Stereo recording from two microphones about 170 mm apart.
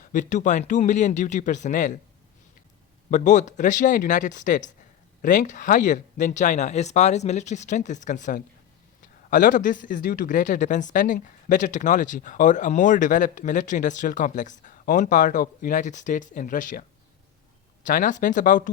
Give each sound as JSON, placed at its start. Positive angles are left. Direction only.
{"t": 0.0, "sound": "speech", "side_deg": 50}
{"t": 3.1, "sound": "speech", "side_deg": 45}
{"t": 17.8, "sound": "speech", "side_deg": 50}